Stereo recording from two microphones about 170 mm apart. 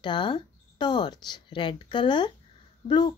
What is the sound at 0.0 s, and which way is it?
Speech, 25° left (ahead or behind).